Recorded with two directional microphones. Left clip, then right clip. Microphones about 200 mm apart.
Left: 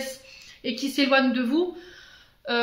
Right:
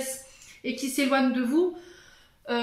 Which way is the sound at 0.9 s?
40° left (ahead or behind).